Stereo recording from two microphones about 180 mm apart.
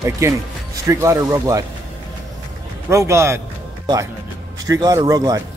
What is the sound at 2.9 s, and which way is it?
Speech, 15° right (ahead or behind).